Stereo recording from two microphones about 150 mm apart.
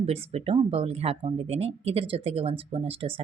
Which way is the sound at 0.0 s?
40° right (ahead or behind).